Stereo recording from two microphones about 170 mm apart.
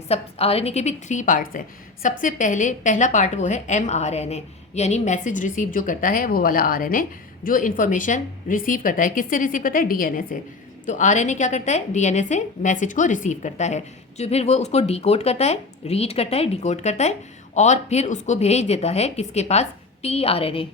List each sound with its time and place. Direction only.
0.1 s a woman's voice: 35° left (ahead or behind)